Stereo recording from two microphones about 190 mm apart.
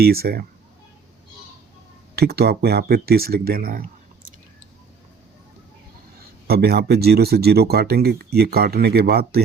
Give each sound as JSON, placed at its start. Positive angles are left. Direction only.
{"t": 0.0, "sound": "speech", "side_deg": -55}
{"t": 2.1, "sound": "speech", "side_deg": -55}
{"t": 6.5, "sound": "speech", "side_deg": -55}